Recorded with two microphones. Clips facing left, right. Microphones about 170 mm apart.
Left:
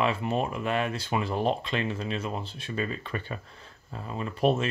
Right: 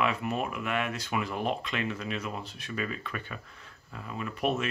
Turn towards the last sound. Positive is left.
turn(degrees=30)  # may be behind; listen again after turning